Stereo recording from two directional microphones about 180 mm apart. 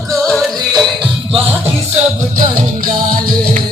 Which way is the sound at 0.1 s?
5° left (ahead or behind).